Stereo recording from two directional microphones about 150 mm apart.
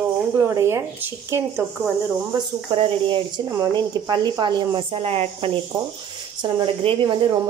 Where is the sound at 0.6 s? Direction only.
20° right (ahead or behind).